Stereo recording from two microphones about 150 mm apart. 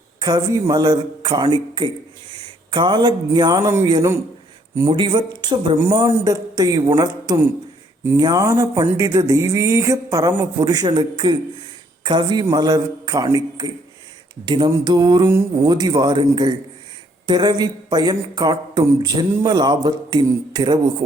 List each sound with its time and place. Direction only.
0.2 s speech: 25° right (ahead or behind)